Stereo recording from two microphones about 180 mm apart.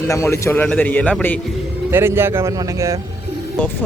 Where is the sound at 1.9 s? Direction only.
10° right (ahead or behind).